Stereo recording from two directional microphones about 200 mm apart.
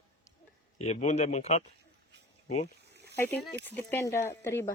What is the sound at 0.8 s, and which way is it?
Speech, 35° left (ahead or behind).